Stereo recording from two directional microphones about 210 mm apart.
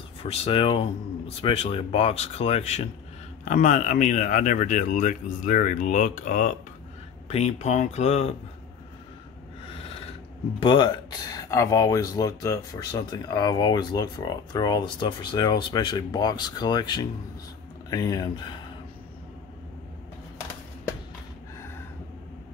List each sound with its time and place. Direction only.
0.2 s speech: 30° left (ahead or behind)
10.6 s speech: 20° left (ahead or behind)